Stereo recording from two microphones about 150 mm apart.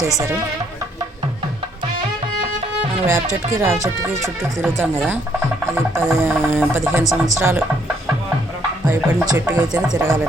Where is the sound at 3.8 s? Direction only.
20° right (ahead or behind).